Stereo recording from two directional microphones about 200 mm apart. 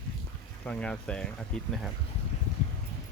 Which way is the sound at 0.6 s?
5° left (ahead or behind).